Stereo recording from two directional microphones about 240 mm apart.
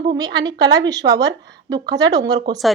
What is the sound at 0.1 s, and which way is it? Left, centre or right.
A woman's voice, centre.